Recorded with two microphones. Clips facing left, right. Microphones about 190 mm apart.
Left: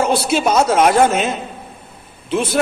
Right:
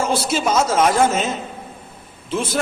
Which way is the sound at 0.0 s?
65° left (ahead or behind).